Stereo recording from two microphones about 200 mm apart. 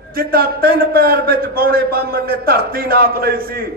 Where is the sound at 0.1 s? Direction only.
50° right (ahead or behind).